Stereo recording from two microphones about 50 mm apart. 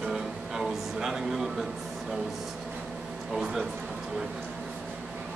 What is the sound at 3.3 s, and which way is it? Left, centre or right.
Speech, centre.